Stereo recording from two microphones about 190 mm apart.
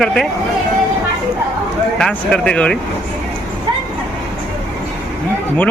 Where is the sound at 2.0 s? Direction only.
5° left (ahead or behind).